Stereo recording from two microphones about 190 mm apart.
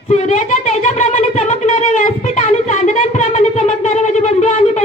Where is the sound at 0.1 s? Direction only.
35° left (ahead or behind).